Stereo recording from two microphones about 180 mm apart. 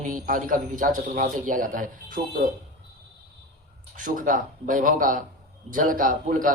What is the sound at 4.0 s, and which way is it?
A man's voice, 45° right (ahead or behind).